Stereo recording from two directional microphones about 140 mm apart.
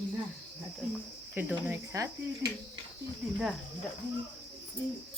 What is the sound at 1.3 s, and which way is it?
Cricket, 10° right (ahead or behind).